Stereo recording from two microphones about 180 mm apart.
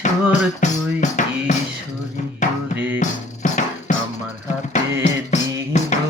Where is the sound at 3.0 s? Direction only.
45° left (ahead or behind).